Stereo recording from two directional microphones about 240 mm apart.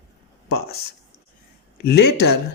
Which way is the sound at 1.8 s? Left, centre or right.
Left.